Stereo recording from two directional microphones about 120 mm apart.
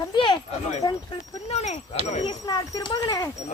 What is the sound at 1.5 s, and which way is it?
Speech, 65° left (ahead or behind).